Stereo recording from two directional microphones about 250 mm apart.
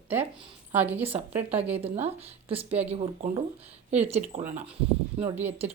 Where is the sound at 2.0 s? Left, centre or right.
Right.